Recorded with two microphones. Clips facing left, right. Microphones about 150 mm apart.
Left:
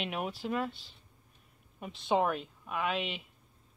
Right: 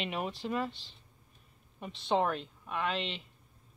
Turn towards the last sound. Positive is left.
turn(degrees=5)  # may be behind; listen again after turning